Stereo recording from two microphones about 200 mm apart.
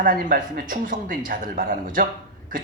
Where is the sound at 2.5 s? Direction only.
45° right (ahead or behind).